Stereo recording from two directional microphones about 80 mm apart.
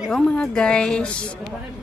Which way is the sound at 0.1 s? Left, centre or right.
Centre.